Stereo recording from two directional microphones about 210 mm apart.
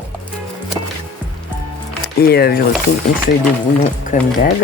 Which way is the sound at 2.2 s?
50° left (ahead or behind).